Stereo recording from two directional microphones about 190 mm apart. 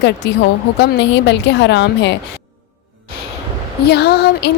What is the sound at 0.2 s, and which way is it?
A woman's voice, 65° left (ahead or behind).